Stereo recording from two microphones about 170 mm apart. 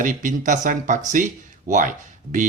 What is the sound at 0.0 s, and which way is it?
Speech, 50° right (ahead or behind).